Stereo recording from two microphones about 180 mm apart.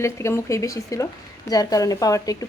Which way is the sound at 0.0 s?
15° left (ahead or behind).